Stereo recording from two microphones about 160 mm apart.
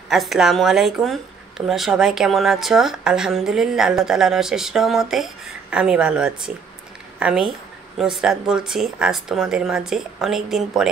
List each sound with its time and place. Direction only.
0.1 s a woman's voice: centre (ahead or behind)